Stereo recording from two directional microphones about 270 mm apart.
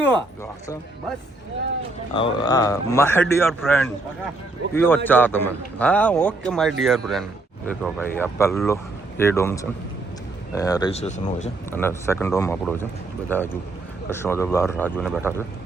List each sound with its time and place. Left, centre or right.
2.1 s a man's voice: centre
11.7 s a man's voice: centre
14.8 s speech: centre